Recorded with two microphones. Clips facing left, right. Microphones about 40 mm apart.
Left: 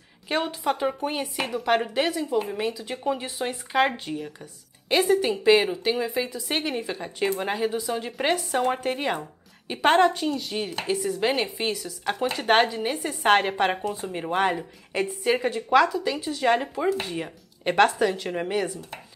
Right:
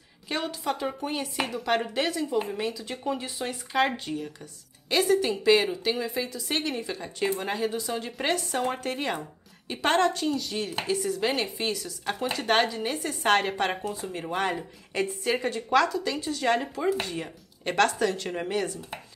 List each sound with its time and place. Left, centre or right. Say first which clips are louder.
0.3 s a woman's voice: left 4 dB; left